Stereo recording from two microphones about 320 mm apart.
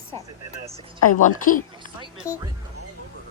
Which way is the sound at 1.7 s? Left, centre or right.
Centre.